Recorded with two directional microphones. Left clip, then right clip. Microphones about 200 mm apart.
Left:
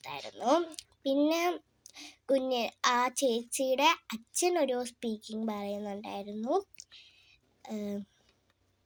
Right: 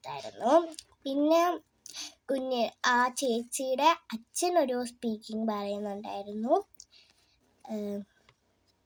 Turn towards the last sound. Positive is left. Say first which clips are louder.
# right 2 dB
turn(degrees=20)  # may be behind; listen again after turning